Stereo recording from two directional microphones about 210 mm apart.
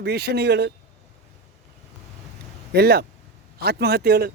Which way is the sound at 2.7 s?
50° right (ahead or behind).